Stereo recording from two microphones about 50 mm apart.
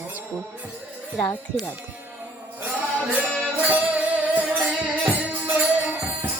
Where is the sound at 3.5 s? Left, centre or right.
Right.